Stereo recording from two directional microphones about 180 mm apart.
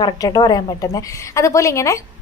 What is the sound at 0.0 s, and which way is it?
A woman's voice, 20° left (ahead or behind).